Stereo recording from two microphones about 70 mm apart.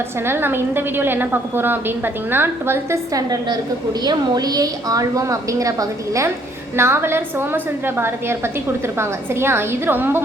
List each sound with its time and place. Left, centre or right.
0.3 s a woman's voice: right
3.2 s a woman's voice: right
6.7 s a woman's voice: right